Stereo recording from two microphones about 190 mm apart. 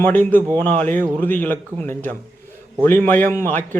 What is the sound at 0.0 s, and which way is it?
A man's voice, 10° left (ahead or behind).